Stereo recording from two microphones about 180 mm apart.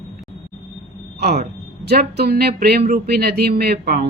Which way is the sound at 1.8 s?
65° right (ahead or behind).